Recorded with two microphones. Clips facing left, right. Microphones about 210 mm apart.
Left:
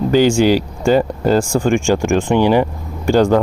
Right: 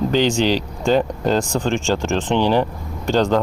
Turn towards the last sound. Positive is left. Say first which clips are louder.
# left 5 dB
turn(degrees=10)  # may be behind; listen again after turning